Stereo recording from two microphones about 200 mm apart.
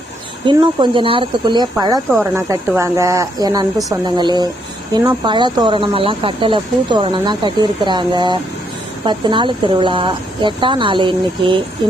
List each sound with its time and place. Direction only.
0.4 s speech: 25° right (ahead or behind)